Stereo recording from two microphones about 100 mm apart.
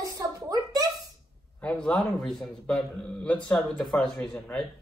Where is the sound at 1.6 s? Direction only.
10° left (ahead or behind).